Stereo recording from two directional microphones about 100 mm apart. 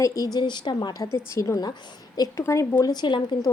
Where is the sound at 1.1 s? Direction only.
30° left (ahead or behind); by 3.2 s 50° left (ahead or behind).